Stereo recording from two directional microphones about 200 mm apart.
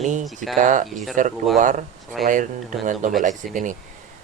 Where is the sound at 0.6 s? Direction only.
40° right (ahead or behind).